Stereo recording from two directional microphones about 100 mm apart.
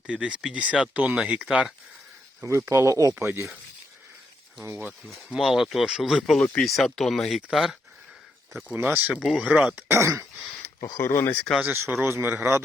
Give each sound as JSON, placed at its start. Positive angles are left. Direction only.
{"t": 0.1, "sound": "speech", "side_deg": -10}
{"t": 2.4, "sound": "speech", "side_deg": -30}
{"t": 4.6, "sound": "speech", "side_deg": -20}
{"t": 5.0, "sound": "speech", "side_deg": 0}
{"t": 8.7, "sound": "speech", "side_deg": -20}
{"t": 9.7, "sound": "speech", "side_deg": -25}
{"t": 10.8, "sound": "speech", "side_deg": 35}
{"t": 11.0, "sound": "speech", "side_deg": 25}
{"t": 11.7, "sound": "speech", "side_deg": -20}